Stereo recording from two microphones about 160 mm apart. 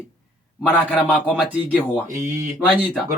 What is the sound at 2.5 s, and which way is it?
Speech, 10° left (ahead or behind).